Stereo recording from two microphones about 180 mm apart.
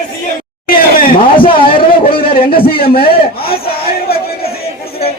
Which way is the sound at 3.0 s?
30° left (ahead or behind).